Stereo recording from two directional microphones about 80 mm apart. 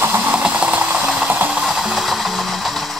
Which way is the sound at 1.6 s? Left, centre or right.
Centre.